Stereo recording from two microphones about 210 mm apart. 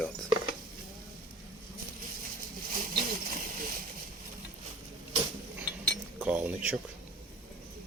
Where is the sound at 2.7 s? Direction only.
40° right (ahead or behind).